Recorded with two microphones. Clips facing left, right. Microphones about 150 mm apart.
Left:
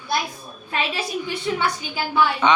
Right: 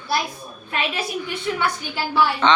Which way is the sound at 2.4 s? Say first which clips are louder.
Right 1 dB; 10° left (ahead or behind).